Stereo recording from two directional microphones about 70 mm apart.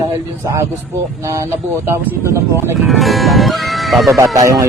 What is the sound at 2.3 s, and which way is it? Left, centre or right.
Speech, right.